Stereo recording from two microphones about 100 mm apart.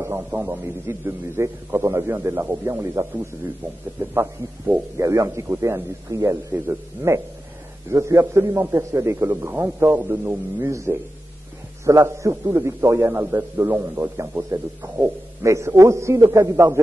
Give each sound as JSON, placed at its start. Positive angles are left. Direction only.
{"t": 0.0, "sound": "a man's voice", "side_deg": -20}
{"t": 6.5, "sound": "a man's voice", "side_deg": -20}
{"t": 10.6, "sound": "a man's voice", "side_deg": -30}